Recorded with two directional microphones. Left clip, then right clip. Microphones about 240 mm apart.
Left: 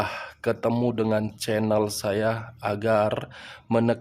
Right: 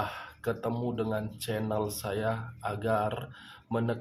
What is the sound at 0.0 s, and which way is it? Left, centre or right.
Speech, left.